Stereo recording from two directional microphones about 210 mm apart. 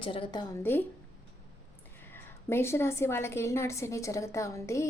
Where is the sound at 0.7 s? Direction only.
10° left (ahead or behind).